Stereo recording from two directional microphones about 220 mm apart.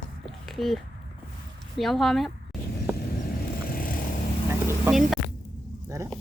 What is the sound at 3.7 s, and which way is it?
Vehicle, 40° left (ahead or behind).